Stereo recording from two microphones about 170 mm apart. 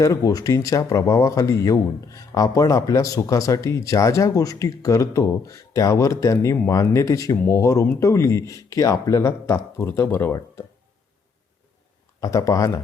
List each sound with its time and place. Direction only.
0.0 s speech: 20° left (ahead or behind)
12.2 s speech: 20° left (ahead or behind)